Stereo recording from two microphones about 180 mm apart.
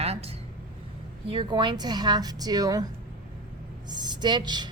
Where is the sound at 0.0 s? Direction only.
35° right (ahead or behind).